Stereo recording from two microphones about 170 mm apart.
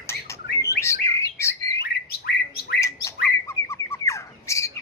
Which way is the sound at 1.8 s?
70° left (ahead or behind).